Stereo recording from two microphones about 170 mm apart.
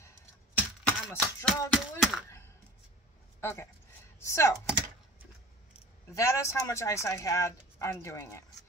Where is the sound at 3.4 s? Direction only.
15° left (ahead or behind).